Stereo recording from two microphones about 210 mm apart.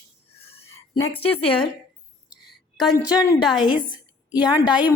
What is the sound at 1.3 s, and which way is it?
Speech, 25° left (ahead or behind).